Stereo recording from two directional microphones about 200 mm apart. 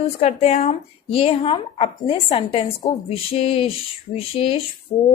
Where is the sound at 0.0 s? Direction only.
30° left (ahead or behind).